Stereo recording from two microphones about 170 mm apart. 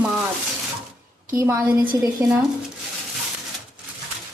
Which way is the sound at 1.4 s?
15° right (ahead or behind).